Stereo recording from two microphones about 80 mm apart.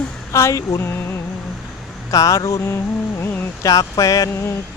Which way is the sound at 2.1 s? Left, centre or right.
Left.